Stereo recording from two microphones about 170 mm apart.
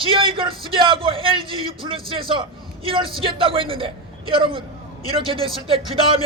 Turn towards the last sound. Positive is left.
turn(degrees=-35)  # may be behind; listen again after turning